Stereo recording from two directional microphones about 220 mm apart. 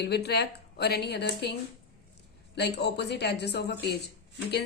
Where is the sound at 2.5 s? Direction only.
50° left (ahead or behind).